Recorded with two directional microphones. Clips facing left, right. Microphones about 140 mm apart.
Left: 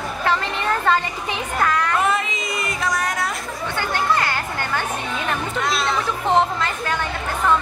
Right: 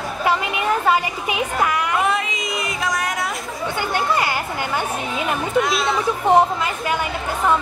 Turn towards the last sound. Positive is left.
turn(degrees=-10)  # may be behind; listen again after turning